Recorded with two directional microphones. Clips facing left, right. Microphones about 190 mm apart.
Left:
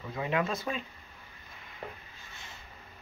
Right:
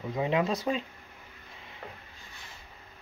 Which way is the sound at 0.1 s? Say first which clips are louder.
Right 3 dB; 20° right (ahead or behind).